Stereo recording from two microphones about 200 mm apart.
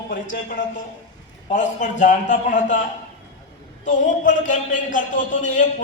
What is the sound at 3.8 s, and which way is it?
A man's voice, 40° left (ahead or behind).